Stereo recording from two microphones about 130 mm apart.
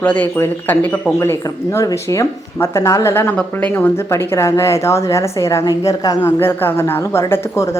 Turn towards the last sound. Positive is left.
turn(degrees=20)  # may be behind; listen again after turning